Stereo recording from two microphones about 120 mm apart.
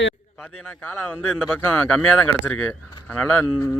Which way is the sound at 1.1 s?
5° right (ahead or behind).